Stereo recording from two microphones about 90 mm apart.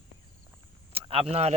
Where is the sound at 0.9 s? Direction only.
90° right.